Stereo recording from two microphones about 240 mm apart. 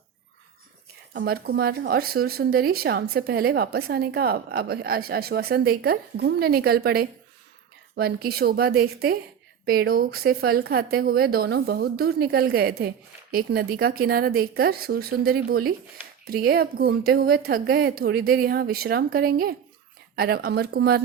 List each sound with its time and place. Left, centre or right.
1.1 s speech: right